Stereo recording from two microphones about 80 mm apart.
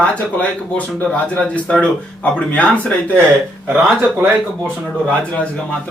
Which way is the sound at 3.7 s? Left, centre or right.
Centre.